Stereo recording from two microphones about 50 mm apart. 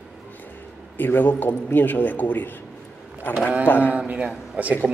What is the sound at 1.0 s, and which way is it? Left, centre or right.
A man's voice, left.